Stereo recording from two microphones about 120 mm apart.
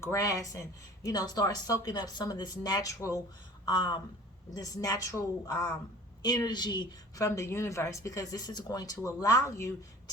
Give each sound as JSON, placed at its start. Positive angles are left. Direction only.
{"t": 0.0, "sound": "a woman's voice", "side_deg": 25}
{"t": 3.7, "sound": "a woman's voice", "side_deg": 40}